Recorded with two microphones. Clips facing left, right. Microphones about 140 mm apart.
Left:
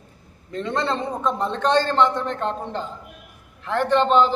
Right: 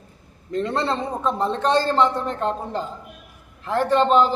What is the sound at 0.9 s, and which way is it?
Speech, 5° right (ahead or behind).